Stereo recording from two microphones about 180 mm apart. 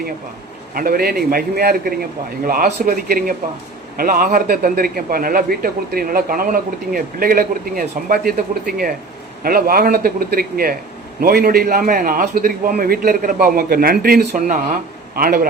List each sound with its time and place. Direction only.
0.7 s a man's voice: 50° right (ahead or behind)